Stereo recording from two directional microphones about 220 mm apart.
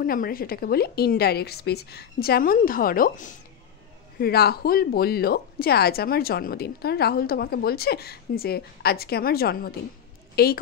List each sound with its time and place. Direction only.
0.0 s a woman's voice: 40° left (ahead or behind)